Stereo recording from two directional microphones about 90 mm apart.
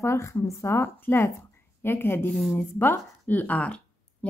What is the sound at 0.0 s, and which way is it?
A woman's voice, 30° left (ahead or behind).